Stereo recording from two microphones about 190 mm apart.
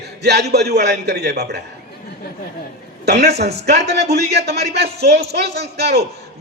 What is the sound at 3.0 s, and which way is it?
A man's voice, 60° right (ahead or behind).